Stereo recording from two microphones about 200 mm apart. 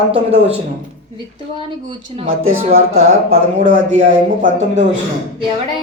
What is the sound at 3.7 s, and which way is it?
Speech, 40° right (ahead or behind).